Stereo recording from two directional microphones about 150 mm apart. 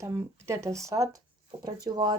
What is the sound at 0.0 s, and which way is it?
Speech, 20° right (ahead or behind).